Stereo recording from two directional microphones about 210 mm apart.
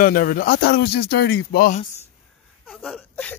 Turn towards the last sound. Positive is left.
turn(degrees=5)  # may be behind; listen again after turning